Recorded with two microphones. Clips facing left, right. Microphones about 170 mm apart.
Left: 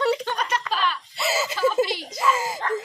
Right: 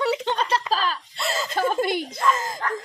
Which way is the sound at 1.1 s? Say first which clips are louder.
Left 2 dB; 5° left (ahead or behind).